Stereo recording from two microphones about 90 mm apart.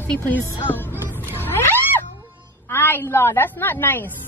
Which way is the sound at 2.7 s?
25° left (ahead or behind).